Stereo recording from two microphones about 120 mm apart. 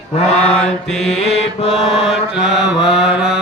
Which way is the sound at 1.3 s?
60° left (ahead or behind).